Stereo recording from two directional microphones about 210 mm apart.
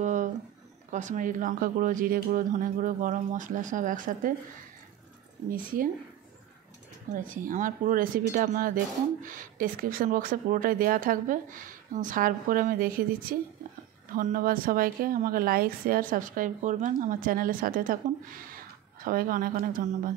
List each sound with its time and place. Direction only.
0.0 s a sound: 35° right (ahead or behind)
0.9 s speech: 35° right (ahead or behind)
7.3 s speech: 40° right (ahead or behind)